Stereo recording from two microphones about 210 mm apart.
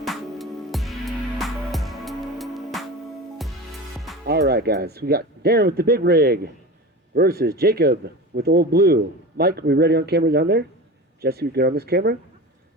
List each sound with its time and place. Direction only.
0.0 s music: centre (ahead or behind)
4.3 s a man's voice: 50° right (ahead or behind)